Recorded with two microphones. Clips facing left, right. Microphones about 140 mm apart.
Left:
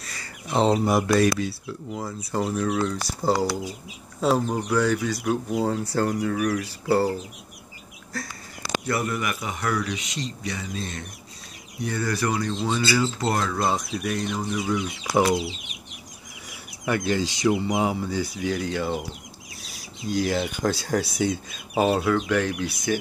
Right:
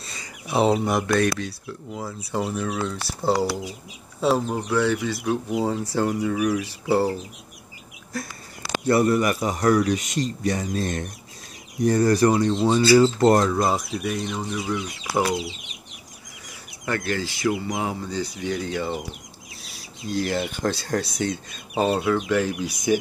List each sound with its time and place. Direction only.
0.0 s a sound: 25° right (ahead or behind)
0.5 s speech: 10° right (ahead or behind)
0.7 s speech: 5° left (ahead or behind)
8.8 s a man's voice: 35° right (ahead or behind)
13.2 s a man's voice: 40° right (ahead or behind)
13.5 s speech: 10° right (ahead or behind)
16.4 s chicken: 15° left (ahead or behind)
17.5 s speech: 10° left (ahead or behind)
22.9 s speech: 15° right (ahead or behind)